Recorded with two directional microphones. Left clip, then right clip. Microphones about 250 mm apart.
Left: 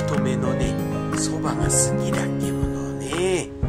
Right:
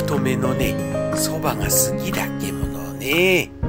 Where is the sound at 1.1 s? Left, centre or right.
Centre.